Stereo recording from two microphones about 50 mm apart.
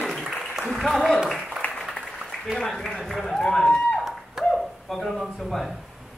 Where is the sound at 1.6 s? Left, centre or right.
Left.